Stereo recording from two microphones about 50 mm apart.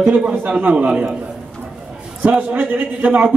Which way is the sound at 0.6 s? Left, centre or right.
Right.